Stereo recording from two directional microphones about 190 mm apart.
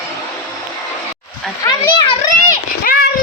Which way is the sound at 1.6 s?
20° left (ahead or behind).